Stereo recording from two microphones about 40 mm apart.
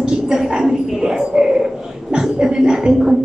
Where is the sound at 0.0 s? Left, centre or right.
Centre.